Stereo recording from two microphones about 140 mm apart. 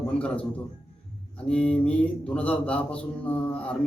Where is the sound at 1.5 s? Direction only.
10° left (ahead or behind).